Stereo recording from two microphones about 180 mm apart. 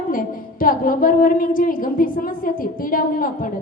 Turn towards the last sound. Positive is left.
turn(degrees=50)  # may be behind; listen again after turning